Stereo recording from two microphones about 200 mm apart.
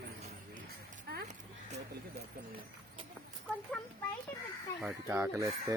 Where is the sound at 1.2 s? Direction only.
35° right (ahead or behind).